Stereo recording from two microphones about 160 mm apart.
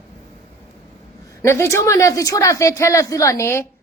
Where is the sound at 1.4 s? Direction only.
15° left (ahead or behind).